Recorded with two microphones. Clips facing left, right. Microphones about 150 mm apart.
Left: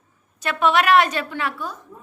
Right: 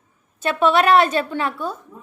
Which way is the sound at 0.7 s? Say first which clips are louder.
Right 1 dB; 30° right (ahead or behind).